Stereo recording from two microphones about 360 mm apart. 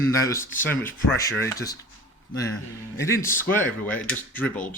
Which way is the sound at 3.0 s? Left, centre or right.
Centre.